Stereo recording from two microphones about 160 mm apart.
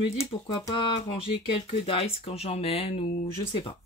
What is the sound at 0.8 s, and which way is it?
Speech, 35° left (ahead or behind).